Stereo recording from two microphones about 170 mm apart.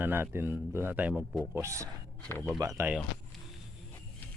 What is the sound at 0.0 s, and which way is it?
A man's voice, 10° right (ahead or behind).